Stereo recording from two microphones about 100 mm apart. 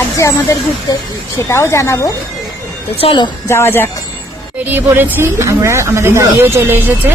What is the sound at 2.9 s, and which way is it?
Speech, 60° left (ahead or behind).